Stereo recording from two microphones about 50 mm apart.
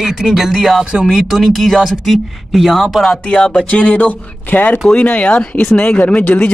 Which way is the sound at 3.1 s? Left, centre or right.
Centre.